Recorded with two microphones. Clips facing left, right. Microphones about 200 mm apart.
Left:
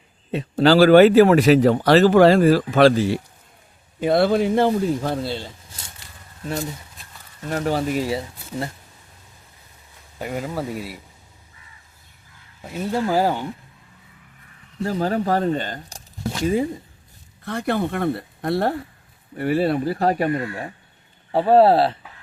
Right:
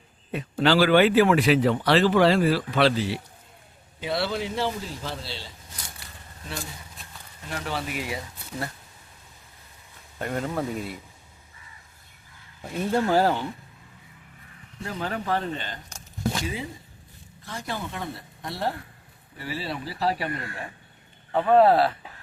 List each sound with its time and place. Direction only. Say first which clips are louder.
0.3 s a sound: left 6 dB; 25° left (ahead or behind)
0.6 s speech: left 7 dB; 40° left (ahead or behind)
7.5 s speech: left 9 dB; 45° left (ahead or behind)
10.2 s speech: left 1 dB; 5° left (ahead or behind)
12.6 s speech: left 1 dB; 5° left (ahead or behind)
14.8 s speech: left 9 dB; 40° left (ahead or behind)
17.4 s speech: left 11 dB; 60° left (ahead or behind); by 20.7 s 45° left (ahead or behind)
21.3 s speech: left 4 dB; 30° left (ahead or behind)